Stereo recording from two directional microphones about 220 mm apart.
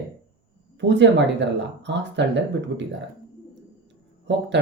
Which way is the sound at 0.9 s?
55° right (ahead or behind).